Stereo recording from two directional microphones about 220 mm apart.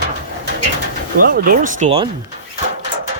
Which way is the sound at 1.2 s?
40° right (ahead or behind).